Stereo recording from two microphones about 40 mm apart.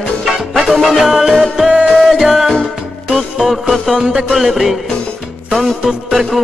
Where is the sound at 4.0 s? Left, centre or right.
Centre.